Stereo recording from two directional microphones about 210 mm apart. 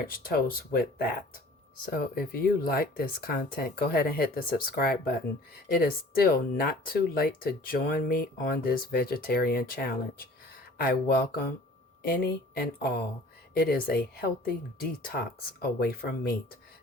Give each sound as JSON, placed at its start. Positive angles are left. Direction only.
{"t": 0.1, "sound": "speech", "side_deg": 45}